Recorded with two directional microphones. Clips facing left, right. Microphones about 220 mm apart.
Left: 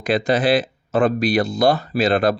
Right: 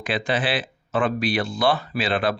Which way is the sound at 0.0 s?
40° left (ahead or behind).